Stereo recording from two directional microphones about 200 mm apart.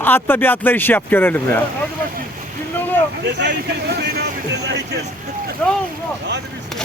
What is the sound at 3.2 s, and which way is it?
Speech, 60° right (ahead or behind).